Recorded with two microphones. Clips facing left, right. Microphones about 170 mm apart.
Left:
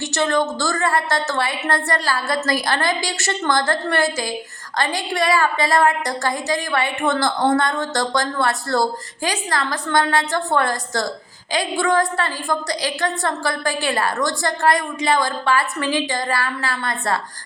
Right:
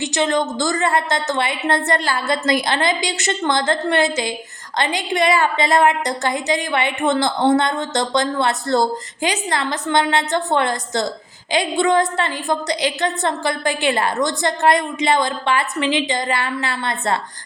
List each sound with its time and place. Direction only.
0.0 s a woman's voice: 15° right (ahead or behind)